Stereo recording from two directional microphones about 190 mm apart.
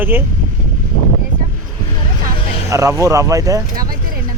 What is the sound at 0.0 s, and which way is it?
Speech, 10° right (ahead or behind).